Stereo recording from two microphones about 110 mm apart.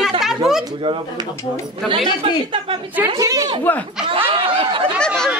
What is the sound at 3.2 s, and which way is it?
Speech, 35° right (ahead or behind).